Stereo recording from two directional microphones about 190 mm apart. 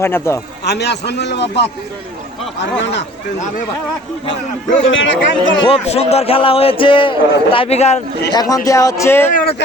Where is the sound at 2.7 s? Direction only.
70° left (ahead or behind).